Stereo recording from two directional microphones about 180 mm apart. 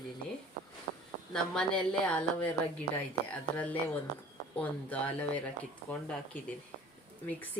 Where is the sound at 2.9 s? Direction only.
35° right (ahead or behind).